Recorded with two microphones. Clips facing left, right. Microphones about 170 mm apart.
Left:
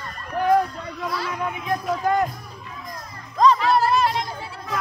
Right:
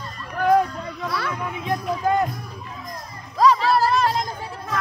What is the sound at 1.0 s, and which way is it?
Speech, 65° right (ahead or behind).